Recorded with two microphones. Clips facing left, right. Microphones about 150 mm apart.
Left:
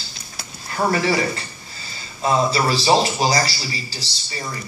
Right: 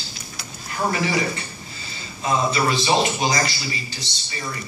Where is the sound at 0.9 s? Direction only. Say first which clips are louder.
Left 3 dB; 35° left (ahead or behind).